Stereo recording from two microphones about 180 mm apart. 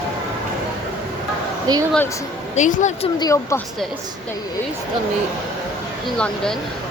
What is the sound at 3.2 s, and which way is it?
Speech, 15° left (ahead or behind).